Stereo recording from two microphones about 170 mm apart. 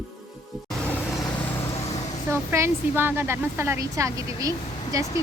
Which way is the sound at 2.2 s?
15° right (ahead or behind).